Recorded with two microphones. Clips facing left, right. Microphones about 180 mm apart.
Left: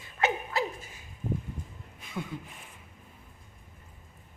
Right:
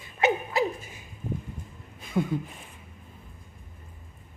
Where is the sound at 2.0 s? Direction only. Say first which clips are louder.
Right 10 dB; 40° right (ahead or behind).